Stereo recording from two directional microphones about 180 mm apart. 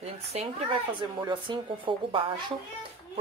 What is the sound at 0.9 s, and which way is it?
Speech, 25° right (ahead or behind).